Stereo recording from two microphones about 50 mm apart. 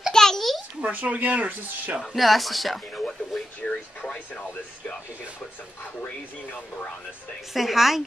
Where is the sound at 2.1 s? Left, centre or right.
Centre; by 4.5 s left.